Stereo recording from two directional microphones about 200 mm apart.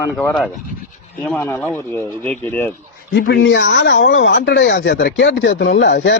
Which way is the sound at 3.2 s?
60° left (ahead or behind).